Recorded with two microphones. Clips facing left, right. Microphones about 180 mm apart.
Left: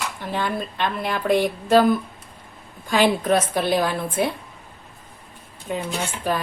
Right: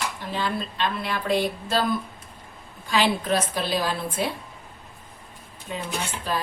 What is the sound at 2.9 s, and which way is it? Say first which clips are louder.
A woman's voice: left 4 dB; 50° left (ahead or behind).